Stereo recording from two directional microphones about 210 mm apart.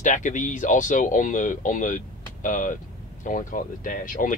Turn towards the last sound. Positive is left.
turn(degrees=40)  # may be behind; listen again after turning